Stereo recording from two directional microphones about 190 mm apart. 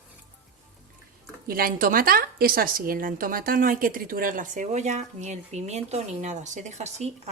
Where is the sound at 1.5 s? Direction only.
50° right (ahead or behind).